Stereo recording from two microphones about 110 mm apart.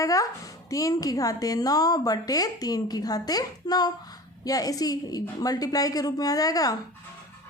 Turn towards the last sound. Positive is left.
turn(degrees=35)  # may be behind; listen again after turning